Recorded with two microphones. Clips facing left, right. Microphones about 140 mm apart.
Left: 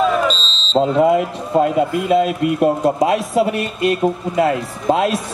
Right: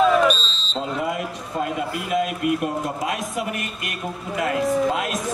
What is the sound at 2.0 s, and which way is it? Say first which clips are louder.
Speech: left 2 dB; 30° left (ahead or behind).